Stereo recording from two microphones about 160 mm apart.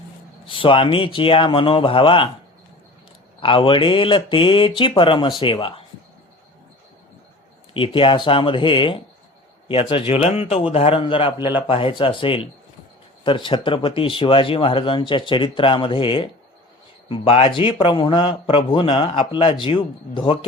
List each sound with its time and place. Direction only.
0.4 s a man's voice: 35° left (ahead or behind)
3.4 s a man's voice: 35° left (ahead or behind)
7.7 s a man's voice: 35° left (ahead or behind)